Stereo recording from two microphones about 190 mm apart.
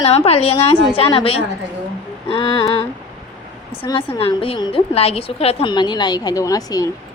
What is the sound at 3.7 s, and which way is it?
A woman's voice, 30° left (ahead or behind).